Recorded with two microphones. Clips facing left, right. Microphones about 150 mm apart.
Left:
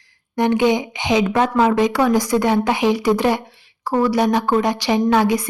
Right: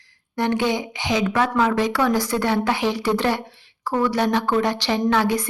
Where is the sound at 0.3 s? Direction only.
15° left (ahead or behind).